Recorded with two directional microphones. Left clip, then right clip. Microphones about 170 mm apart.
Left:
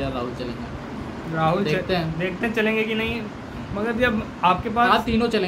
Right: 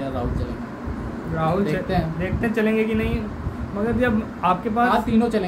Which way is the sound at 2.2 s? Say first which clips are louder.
Even; centre (ahead or behind).